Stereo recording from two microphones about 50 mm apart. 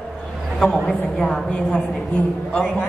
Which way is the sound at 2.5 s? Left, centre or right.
Left.